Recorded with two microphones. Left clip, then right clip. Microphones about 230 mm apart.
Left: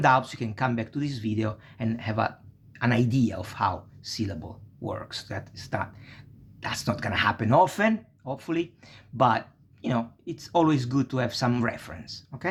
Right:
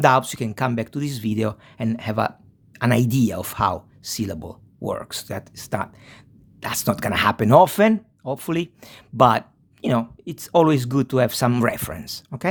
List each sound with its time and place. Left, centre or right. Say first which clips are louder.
0.0 s speech: right 5 dB; right